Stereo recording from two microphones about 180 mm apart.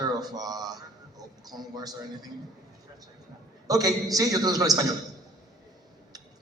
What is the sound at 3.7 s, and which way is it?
A man's voice, 20° right (ahead or behind).